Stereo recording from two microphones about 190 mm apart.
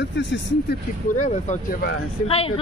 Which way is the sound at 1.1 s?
40° left (ahead or behind).